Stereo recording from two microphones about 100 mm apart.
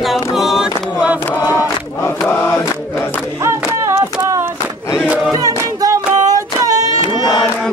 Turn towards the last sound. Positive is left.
turn(degrees=-35)  # may be behind; listen again after turning